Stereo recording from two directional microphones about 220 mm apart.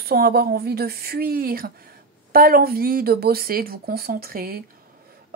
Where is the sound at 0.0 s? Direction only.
45° right (ahead or behind).